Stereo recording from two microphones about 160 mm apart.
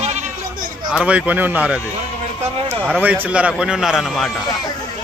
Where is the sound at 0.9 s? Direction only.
5° right (ahead or behind).